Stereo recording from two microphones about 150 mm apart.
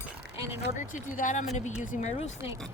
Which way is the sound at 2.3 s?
20° right (ahead or behind).